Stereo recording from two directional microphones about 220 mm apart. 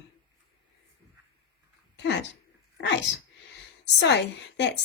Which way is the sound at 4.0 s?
50° left (ahead or behind).